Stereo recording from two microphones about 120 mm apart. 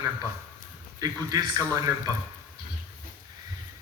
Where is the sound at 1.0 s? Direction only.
30° right (ahead or behind).